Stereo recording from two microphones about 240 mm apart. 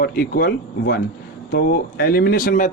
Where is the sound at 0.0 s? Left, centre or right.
Left.